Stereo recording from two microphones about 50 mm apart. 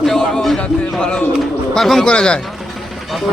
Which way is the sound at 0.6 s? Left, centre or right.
Centre.